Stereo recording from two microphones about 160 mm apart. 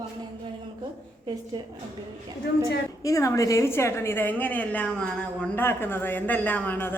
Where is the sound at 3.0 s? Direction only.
20° left (ahead or behind).